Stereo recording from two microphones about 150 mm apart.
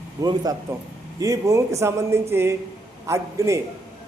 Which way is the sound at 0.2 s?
25° right (ahead or behind).